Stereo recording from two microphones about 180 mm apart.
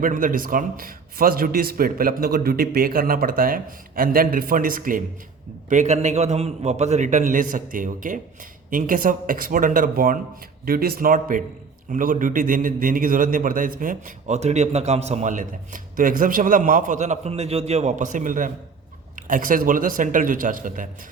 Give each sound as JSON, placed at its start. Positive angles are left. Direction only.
{"t": 0.0, "sound": "a man's voice", "side_deg": -50}